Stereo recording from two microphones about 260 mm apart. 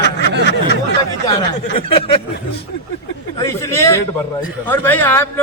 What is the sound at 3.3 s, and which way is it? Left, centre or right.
A man's voice, centre.